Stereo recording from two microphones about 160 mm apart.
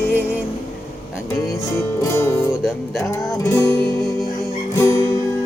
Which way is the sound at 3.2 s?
20° left (ahead or behind).